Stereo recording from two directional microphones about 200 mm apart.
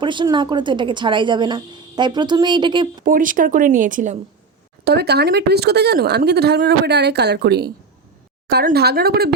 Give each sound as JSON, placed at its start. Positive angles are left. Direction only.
{"t": 0.0, "sound": "a woman's voice", "side_deg": -25}
{"t": 3.0, "sound": "speech", "side_deg": -45}
{"t": 4.9, "sound": "speech", "side_deg": -55}